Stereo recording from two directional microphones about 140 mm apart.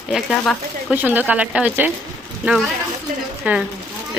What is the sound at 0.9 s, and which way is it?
Speech, 10° right (ahead or behind).